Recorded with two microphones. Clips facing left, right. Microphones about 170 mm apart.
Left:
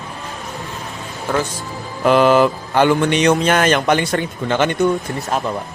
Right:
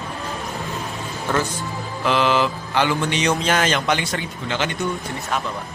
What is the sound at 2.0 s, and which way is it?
Speech, 50° left (ahead or behind).